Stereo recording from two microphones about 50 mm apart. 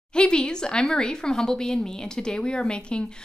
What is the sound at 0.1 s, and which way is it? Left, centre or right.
A woman's voice, centre.